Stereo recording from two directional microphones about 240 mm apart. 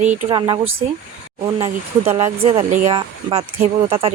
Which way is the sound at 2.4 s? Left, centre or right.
Right.